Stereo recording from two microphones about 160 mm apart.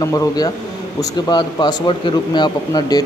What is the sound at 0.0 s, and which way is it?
A man's voice, 20° left (ahead or behind).